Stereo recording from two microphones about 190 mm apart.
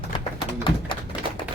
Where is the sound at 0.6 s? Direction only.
25° left (ahead or behind).